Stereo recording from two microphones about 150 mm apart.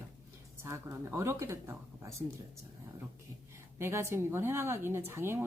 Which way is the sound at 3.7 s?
15° right (ahead or behind).